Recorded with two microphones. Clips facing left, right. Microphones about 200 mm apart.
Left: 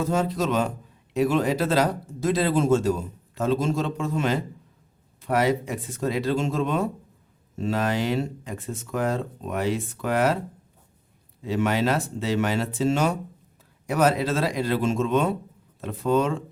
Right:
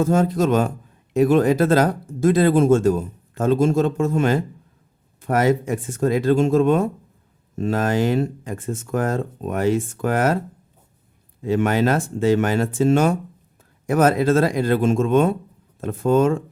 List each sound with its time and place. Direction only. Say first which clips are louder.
0.0 s speech: right 6 dB; 50° right (ahead or behind)
11.4 s speech: right 5 dB; 50° right (ahead or behind)